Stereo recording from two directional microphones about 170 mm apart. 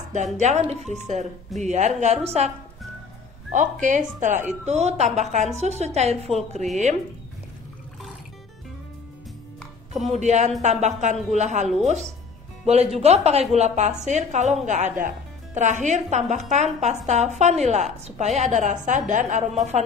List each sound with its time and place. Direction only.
0.1 s speech: 45° right (ahead or behind)
3.5 s speech: 50° right (ahead or behind)
10.2 s speech: 40° right (ahead or behind)